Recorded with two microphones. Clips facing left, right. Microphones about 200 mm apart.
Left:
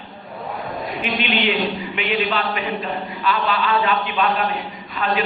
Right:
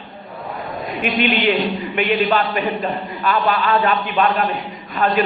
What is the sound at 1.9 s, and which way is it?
Speech, 45° right (ahead or behind).